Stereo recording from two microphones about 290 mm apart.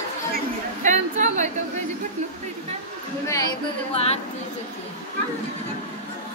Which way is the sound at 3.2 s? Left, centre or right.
Centre.